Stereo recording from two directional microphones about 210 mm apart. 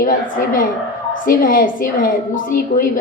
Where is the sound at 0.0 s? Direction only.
40° left (ahead or behind).